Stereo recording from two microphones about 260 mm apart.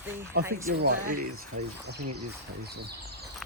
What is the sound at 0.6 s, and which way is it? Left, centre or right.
Speech, right.